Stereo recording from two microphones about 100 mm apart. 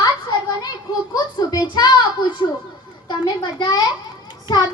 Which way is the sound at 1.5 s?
40° left (ahead or behind).